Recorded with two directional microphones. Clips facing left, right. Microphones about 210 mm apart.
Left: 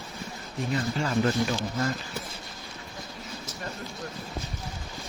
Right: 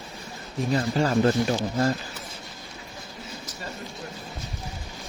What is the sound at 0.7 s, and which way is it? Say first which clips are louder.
Speech: right 5 dB; 35° right (ahead or behind).